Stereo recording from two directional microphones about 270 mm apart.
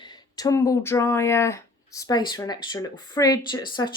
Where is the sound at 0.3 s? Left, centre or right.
Centre.